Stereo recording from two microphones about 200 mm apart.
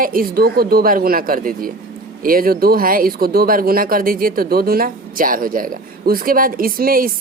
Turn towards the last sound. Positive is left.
turn(degrees=-45)  # may be behind; listen again after turning